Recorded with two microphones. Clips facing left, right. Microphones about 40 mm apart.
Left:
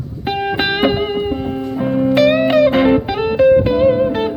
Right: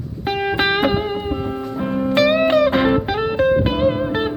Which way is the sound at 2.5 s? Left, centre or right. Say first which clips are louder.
Left 3 dB; left.